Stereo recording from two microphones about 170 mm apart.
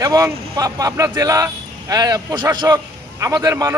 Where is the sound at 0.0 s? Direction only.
20° right (ahead or behind).